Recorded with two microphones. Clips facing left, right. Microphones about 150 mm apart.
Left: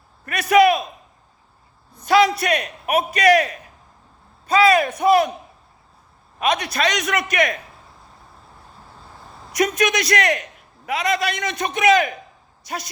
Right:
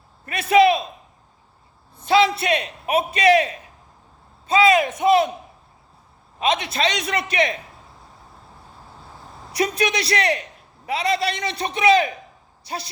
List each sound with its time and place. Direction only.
0.3 s a man's voice: 25° right (ahead or behind)
2.0 s a man's voice: 25° right (ahead or behind)
6.4 s a man's voice: 25° right (ahead or behind)
9.7 s a man's voice: 30° right (ahead or behind)